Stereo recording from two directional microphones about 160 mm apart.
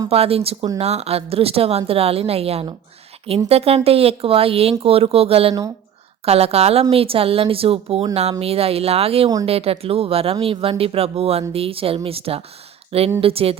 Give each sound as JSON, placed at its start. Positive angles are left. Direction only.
{"t": 0.1, "sound": "speech", "side_deg": -40}